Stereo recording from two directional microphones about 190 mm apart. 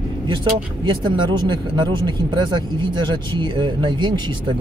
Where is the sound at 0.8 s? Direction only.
25° right (ahead or behind).